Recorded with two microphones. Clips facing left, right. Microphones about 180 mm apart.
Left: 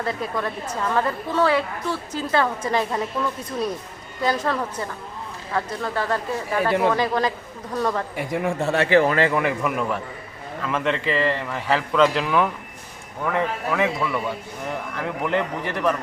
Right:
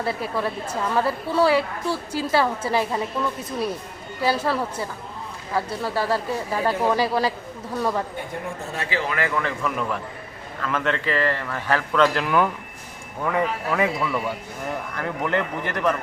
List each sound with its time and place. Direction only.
0.0 s a woman's voice: 5° right (ahead or behind)
4.2 s a woman's voice: 5° right (ahead or behind)
8.1 s a man's voice: 90° left; by 9.0 s 65° left (ahead or behind)
9.0 s a man's voice: 30° left (ahead or behind)
9.4 s a man's voice: 10° left (ahead or behind)
11.3 s a man's voice: 10° left (ahead or behind)